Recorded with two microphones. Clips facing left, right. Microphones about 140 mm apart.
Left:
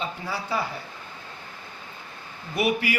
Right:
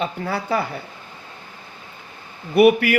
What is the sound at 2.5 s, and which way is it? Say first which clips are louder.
Speech: right 11 dB; 60° right (ahead or behind).